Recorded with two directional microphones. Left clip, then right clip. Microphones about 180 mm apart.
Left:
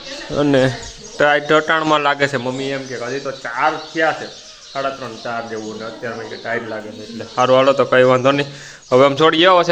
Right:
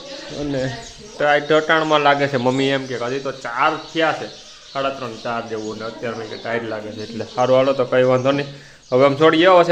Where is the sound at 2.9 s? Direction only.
20° right (ahead or behind).